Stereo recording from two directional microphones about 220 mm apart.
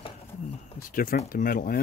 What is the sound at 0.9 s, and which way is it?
Speech, 40° left (ahead or behind).